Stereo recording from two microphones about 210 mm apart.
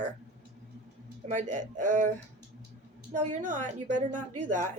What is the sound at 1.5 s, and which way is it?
Speech, 35° right (ahead or behind).